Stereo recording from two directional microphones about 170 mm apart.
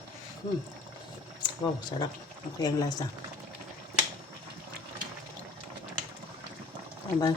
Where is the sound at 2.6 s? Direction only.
20° left (ahead or behind).